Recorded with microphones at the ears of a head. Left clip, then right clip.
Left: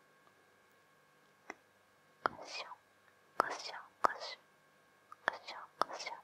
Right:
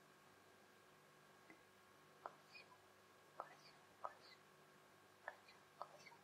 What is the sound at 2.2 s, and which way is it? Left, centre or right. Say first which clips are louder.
Whispering: left 19 dB; left.